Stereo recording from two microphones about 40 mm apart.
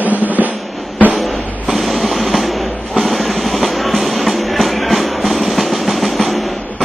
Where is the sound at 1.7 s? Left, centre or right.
Centre.